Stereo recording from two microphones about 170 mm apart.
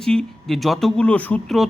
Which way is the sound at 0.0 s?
5° left (ahead or behind).